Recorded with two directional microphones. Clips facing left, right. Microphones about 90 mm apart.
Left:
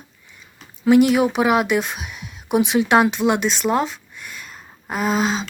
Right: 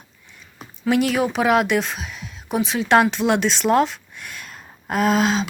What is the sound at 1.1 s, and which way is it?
Speech, 5° left (ahead or behind).